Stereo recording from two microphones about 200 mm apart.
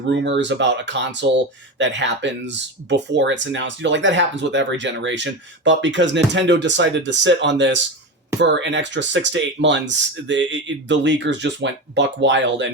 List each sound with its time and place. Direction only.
0.1 s speech: 60° right (ahead or behind)